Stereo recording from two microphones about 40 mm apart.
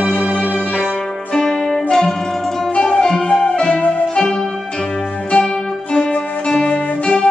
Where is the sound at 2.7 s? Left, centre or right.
Left.